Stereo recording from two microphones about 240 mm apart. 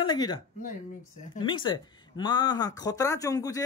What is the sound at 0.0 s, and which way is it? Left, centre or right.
Speech, centre.